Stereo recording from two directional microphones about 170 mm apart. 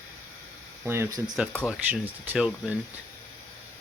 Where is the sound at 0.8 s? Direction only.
15° right (ahead or behind).